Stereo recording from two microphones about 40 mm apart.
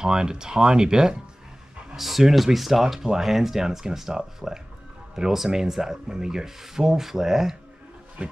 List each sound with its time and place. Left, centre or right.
0.0 s speech: centre
2.0 s speech: centre
8.2 s a sound: right